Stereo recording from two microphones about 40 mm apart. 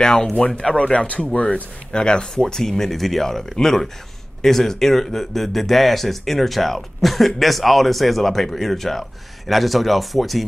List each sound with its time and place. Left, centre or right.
0.0 s speech: centre
0.9 s speech: left
1.3 s speech: left
2.4 s speech: centre